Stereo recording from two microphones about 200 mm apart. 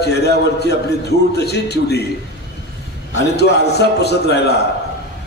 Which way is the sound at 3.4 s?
55° left (ahead or behind).